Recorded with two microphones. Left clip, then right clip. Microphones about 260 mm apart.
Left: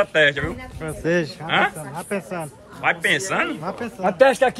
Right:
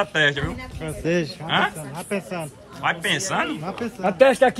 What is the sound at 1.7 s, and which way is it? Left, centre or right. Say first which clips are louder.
Speech: left 1 dB; centre.